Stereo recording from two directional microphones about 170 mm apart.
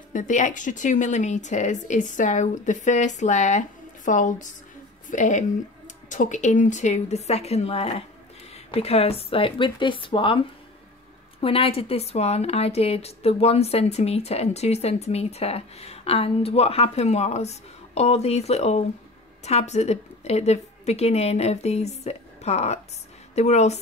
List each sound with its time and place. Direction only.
0.1 s a woman's voice: 50° left (ahead or behind); by 10.4 s 30° left (ahead or behind)
11.4 s a woman's voice: 35° left (ahead or behind)